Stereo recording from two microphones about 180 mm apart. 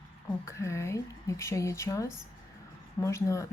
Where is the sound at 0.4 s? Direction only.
15° left (ahead or behind).